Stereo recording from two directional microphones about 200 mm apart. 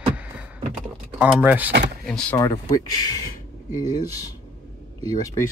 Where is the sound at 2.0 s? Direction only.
5° left (ahead or behind).